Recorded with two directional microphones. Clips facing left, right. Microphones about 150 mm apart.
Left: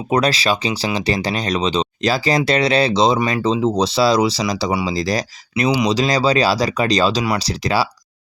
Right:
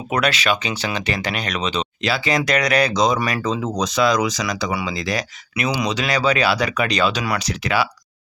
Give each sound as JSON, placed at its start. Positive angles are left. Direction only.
{"t": 0.1, "sound": "speech", "side_deg": 35}